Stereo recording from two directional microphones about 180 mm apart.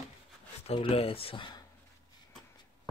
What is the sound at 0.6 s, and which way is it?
Speech, 35° left (ahead or behind).